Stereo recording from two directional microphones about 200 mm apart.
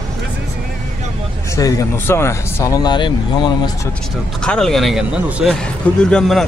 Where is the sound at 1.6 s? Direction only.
15° left (ahead or behind).